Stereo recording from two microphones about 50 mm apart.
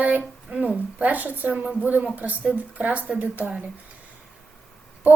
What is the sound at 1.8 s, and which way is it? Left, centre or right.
A woman's voice, right.